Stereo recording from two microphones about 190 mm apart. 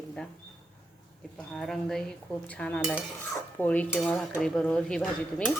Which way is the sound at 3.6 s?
10° left (ahead or behind).